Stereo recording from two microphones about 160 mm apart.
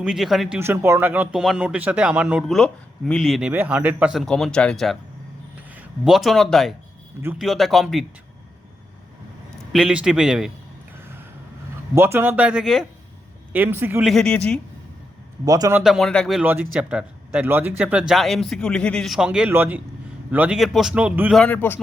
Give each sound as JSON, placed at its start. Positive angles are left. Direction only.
{"t": 0.0, "sound": "speech", "side_deg": 0}
{"t": 0.6, "sound": "speech", "side_deg": -15}
{"t": 3.5, "sound": "speech", "side_deg": -10}
{"t": 9.7, "sound": "speech", "side_deg": -5}
{"t": 11.9, "sound": "speech", "side_deg": -15}
{"t": 14.0, "sound": "speech", "side_deg": 0}
{"t": 15.4, "sound": "speech", "side_deg": -20}
{"t": 15.8, "sound": "speech", "side_deg": 0}
{"t": 16.4, "sound": "speech", "side_deg": -10}
{"t": 21.3, "sound": "a man's voice", "side_deg": 10}